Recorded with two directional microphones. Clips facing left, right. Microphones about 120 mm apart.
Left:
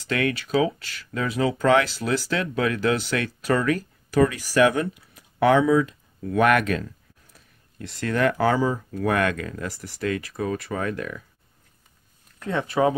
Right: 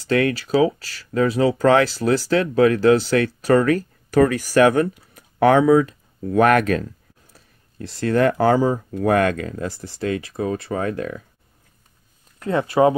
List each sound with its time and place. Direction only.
0.0 s speech: 30° right (ahead or behind)
7.8 s speech: 35° right (ahead or behind)
12.4 s speech: 35° right (ahead or behind)